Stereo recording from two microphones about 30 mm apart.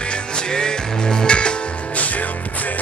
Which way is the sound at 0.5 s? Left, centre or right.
Left.